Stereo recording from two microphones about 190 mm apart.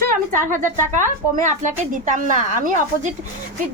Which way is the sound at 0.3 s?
40° right (ahead or behind).